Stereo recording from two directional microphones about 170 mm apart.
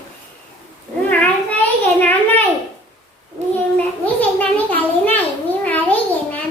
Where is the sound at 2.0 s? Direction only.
10° left (ahead or behind).